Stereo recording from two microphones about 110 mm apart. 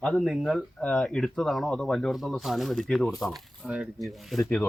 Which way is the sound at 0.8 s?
10° left (ahead or behind).